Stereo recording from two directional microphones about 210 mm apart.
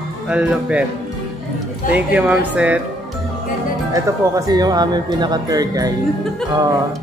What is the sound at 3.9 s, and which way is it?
Speech, 15° right (ahead or behind).